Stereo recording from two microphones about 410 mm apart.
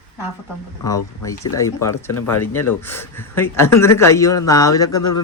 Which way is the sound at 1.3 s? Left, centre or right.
Left.